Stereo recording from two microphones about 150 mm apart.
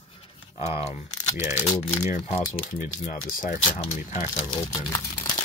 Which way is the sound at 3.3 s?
65° left (ahead or behind).